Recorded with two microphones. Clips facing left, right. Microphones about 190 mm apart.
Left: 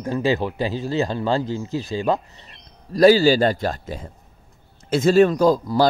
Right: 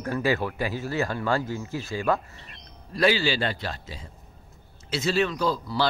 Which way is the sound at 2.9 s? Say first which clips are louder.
Left 10 dB; 40° left (ahead or behind).